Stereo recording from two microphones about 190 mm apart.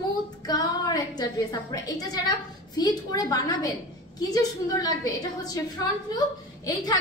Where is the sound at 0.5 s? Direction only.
20° left (ahead or behind).